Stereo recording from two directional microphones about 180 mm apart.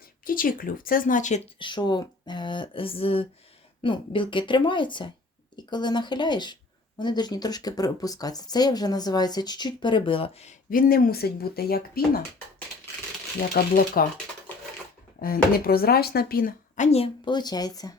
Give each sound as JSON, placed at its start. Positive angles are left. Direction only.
{"t": 0.3, "sound": "speech", "side_deg": 50}
{"t": 1.5, "sound": "speech", "side_deg": 25}
{"t": 10.7, "sound": "speech", "side_deg": 55}
{"t": 13.5, "sound": "speech", "side_deg": 55}
{"t": 15.2, "sound": "speech", "side_deg": 55}